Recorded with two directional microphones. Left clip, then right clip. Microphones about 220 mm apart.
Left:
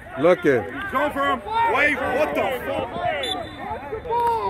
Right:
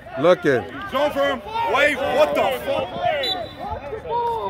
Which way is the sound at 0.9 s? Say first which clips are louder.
Right 2 dB; 50° right (ahead or behind).